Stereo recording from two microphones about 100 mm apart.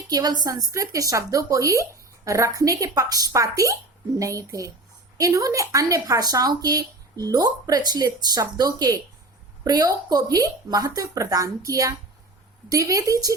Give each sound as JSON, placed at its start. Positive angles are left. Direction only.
{"t": 0.1, "sound": "speech", "side_deg": -40}